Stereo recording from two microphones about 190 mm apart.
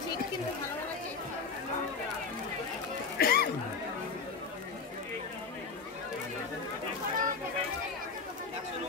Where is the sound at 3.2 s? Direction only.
50° left (ahead or behind).